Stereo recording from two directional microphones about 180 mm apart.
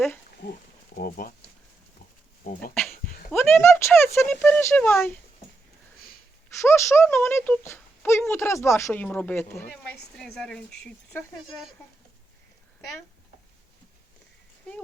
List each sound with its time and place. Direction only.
0.4 s speech: 60° left (ahead or behind)
2.4 s speech: 50° left (ahead or behind)
2.9 s a sound: 55° left (ahead or behind)
3.3 s speech: 15° left (ahead or behind)
6.6 s speech: 15° left (ahead or behind)